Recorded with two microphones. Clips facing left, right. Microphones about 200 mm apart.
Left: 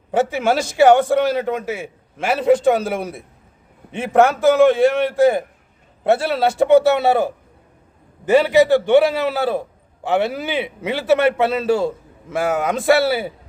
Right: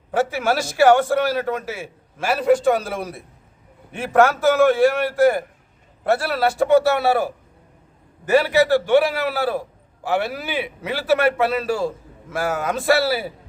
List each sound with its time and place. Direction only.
0.1 s a man's voice: 20° left (ahead or behind)